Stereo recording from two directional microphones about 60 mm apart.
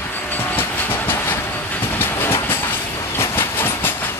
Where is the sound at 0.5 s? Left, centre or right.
Left.